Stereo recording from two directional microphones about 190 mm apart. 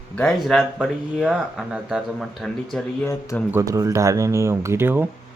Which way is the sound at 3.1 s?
15° left (ahead or behind).